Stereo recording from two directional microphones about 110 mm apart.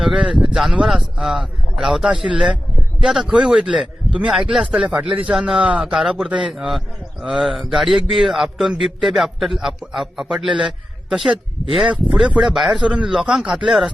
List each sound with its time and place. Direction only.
0.0 s a man's voice: 5° right (ahead or behind)